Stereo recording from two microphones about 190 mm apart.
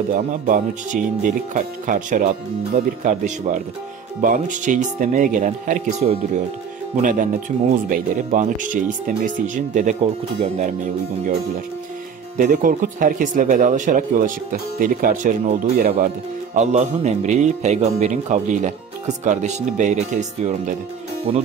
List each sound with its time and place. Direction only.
0.1 s speech: 40° right (ahead or behind)
12.4 s speech: 45° right (ahead or behind)